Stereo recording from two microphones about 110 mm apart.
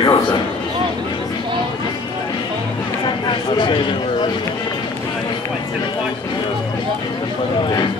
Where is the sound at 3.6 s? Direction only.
45° left (ahead or behind).